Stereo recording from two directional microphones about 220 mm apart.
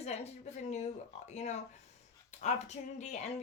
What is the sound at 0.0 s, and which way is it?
A woman's voice, 30° left (ahead or behind).